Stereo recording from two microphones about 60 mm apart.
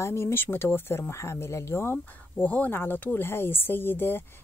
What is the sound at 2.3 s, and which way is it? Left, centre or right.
Speech, left.